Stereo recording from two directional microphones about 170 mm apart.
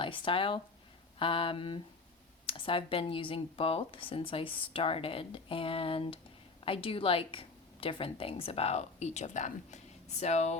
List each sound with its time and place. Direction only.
0.0 s a woman's voice: 30° left (ahead or behind)